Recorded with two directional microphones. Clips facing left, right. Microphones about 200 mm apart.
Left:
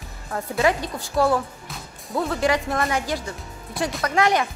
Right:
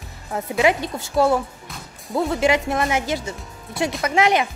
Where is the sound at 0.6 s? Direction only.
20° right (ahead or behind).